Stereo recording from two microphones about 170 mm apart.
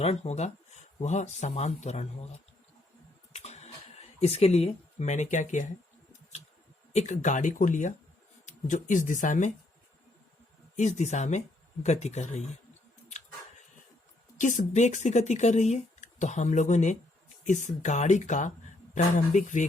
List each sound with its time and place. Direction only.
0.0 s speech: 40° left (ahead or behind)
3.3 s a sound: 40° left (ahead or behind)
6.9 s speech: 45° left (ahead or behind)
10.8 s speech: 45° left (ahead or behind)
13.1 s a sound: 45° left (ahead or behind)
14.3 s speech: 50° left (ahead or behind)